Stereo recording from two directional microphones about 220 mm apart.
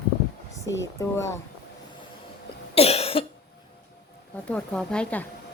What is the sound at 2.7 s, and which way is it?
Cough, 25° left (ahead or behind).